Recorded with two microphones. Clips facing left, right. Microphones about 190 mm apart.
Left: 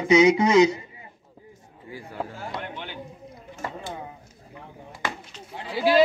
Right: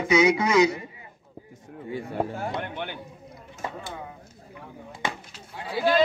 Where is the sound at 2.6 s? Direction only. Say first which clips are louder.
Right 3 dB; 55° right (ahead or behind).